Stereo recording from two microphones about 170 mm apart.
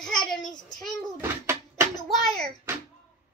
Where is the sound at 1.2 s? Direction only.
15° right (ahead or behind).